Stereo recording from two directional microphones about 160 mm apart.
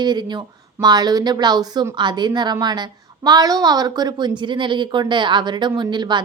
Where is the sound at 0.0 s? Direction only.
25° right (ahead or behind).